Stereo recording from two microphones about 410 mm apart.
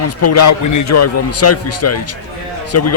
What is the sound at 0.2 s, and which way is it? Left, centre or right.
Speech, left.